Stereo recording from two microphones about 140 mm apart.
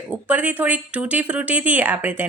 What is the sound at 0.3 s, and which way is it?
A woman's voice, 10° right (ahead or behind).